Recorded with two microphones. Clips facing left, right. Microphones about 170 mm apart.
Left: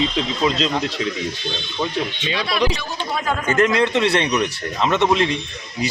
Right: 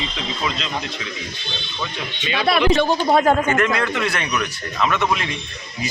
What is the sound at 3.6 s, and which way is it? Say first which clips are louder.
Speech: left 4 dB; 25° left (ahead or behind).